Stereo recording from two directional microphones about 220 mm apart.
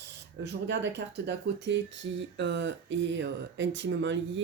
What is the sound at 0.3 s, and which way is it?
Speech, 55° right (ahead or behind).